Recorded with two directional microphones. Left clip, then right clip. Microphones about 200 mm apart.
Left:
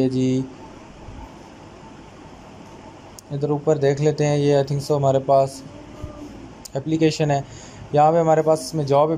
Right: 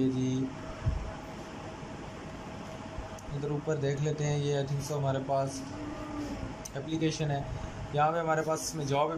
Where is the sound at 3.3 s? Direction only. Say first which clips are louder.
Left 13 dB; 45° left (ahead or behind).